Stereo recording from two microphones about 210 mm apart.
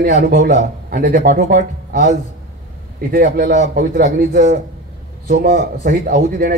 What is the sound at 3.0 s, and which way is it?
A man's voice, 45° right (ahead or behind).